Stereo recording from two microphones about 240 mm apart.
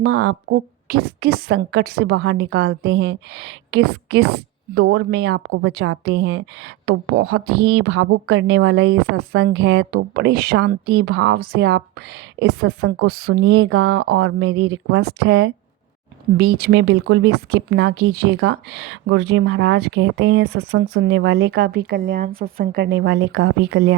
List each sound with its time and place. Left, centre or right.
0.0 s speech: right
14.5 s speech: right